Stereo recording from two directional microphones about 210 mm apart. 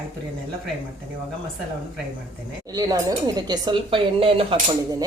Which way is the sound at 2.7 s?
20° right (ahead or behind).